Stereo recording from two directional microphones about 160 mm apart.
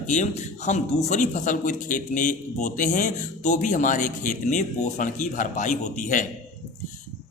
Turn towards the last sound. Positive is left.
turn(degrees=55)  # may be behind; listen again after turning